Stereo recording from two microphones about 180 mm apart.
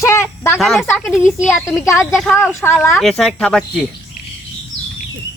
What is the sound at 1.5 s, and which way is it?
Speech, 15° left (ahead or behind).